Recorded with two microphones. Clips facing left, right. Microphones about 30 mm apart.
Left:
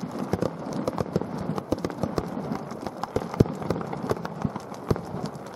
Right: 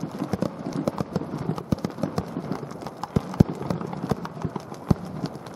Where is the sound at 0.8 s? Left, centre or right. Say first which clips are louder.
Right 1 dB; centre.